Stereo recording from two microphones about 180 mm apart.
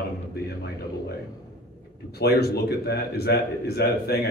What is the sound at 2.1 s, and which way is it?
A man's voice, 60° left (ahead or behind).